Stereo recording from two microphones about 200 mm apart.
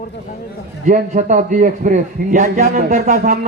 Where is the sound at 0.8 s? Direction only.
40° right (ahead or behind).